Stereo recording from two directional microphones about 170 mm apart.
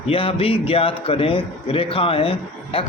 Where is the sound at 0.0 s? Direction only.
35° left (ahead or behind).